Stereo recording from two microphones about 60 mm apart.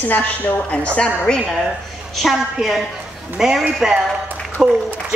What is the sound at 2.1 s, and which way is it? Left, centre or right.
A woman's voice, centre.